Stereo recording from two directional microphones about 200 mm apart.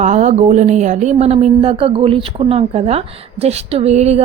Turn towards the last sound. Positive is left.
turn(degrees=-30)  # may be behind; listen again after turning